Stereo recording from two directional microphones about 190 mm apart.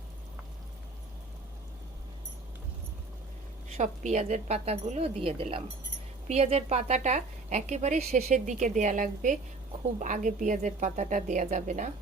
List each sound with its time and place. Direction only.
3.8 s a woman's voice: 35° right (ahead or behind)